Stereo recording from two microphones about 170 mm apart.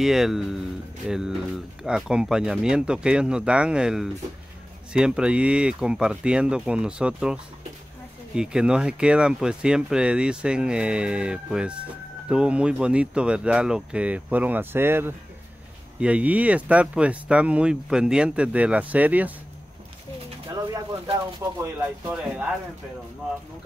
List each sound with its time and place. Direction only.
0.0 s speech: centre (ahead or behind)
8.4 s speech: 5° right (ahead or behind)
21.4 s speech: 15° right (ahead or behind)